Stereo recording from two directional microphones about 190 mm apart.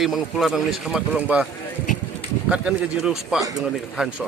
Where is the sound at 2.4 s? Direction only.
5° right (ahead or behind).